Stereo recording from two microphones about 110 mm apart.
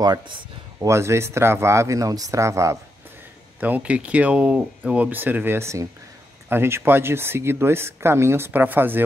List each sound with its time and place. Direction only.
0.0 s speech: 40° right (ahead or behind)
3.6 s speech: 15° right (ahead or behind)